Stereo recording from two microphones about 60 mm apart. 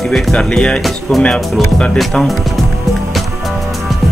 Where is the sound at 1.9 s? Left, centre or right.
Centre.